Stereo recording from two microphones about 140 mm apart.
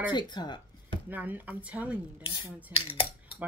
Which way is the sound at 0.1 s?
30° left (ahead or behind).